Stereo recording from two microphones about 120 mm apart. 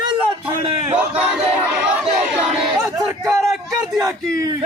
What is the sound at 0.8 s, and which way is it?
Battle cry, 15° right (ahead or behind).